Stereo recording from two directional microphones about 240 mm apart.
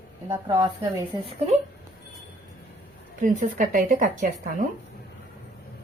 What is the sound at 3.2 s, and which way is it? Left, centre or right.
Speech, right.